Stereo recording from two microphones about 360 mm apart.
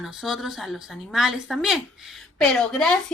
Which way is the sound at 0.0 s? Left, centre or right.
Centre.